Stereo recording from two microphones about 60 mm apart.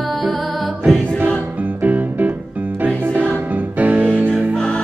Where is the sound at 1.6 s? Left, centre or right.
Right.